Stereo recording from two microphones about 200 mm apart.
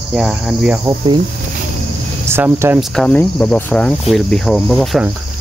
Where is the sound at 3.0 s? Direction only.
5° left (ahead or behind).